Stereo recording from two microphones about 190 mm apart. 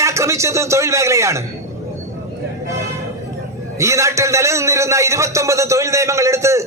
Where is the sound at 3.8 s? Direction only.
15° right (ahead or behind).